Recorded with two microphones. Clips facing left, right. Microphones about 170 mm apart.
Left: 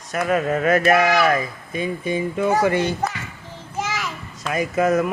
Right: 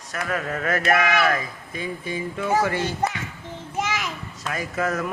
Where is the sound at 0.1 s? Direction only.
20° left (ahead or behind).